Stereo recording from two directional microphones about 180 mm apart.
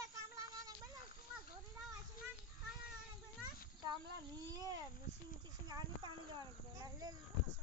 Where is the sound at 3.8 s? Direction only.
25° right (ahead or behind).